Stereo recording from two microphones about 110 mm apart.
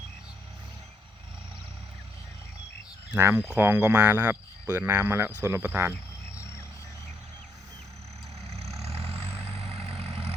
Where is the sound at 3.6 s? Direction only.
20° right (ahead or behind).